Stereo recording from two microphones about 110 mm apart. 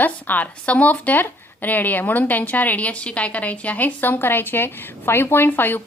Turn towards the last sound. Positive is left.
turn(degrees=20)  # may be behind; listen again after turning